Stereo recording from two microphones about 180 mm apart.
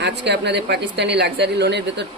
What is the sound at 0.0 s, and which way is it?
A woman's voice, 70° right (ahead or behind).